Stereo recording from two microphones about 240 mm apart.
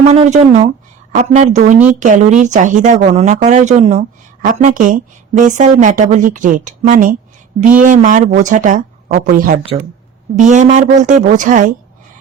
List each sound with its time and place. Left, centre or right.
0.1 s speech: right